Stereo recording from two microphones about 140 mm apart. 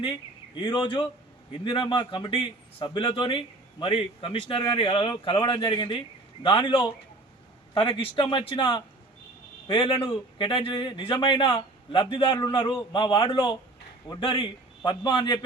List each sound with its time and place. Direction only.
0.5 s a man's voice: 35° left (ahead or behind)